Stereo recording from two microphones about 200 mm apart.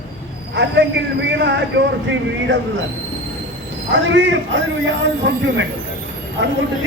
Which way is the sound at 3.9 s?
65° right (ahead or behind).